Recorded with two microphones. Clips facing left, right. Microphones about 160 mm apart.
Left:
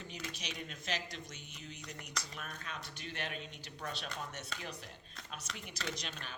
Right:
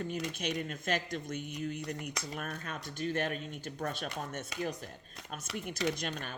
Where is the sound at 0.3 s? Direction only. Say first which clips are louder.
Right 10 dB; 50° right (ahead or behind).